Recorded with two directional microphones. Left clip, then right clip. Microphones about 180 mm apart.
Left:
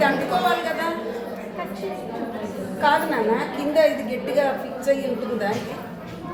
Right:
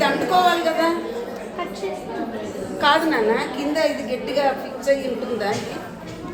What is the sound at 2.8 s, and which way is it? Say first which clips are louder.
Speech: right 2 dB; 40° right (ahead or behind).